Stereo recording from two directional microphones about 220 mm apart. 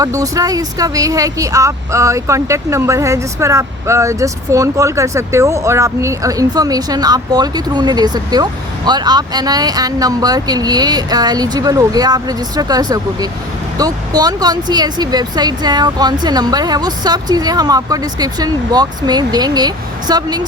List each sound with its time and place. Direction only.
0.0 s speech: 15° right (ahead or behind)